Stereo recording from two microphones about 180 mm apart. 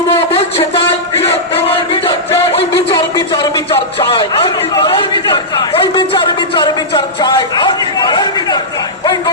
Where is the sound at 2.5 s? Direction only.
35° left (ahead or behind).